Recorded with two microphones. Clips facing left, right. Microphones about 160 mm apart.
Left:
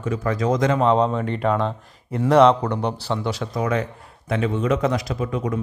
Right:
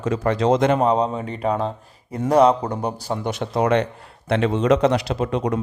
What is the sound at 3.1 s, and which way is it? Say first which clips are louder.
A man's voice: right 2 dB; 50° right (ahead or behind).